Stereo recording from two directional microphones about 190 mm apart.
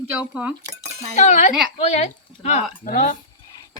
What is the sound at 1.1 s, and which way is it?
Speech, 35° left (ahead or behind).